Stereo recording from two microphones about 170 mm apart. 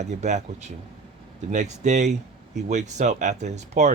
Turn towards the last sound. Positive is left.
turn(degrees=-45)  # may be behind; listen again after turning